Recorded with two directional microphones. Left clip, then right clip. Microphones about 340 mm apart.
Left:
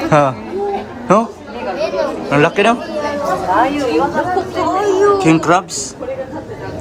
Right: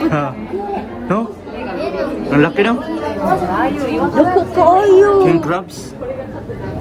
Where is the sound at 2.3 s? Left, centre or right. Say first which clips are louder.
Left 2 dB; centre.